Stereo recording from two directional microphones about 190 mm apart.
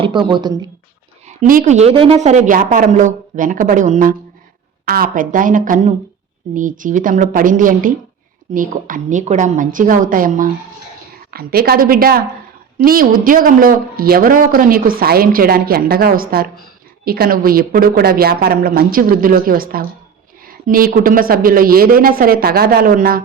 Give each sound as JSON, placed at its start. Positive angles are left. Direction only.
{"t": 0.0, "sound": "speech", "side_deg": -25}
{"t": 1.3, "sound": "a woman's voice", "side_deg": -40}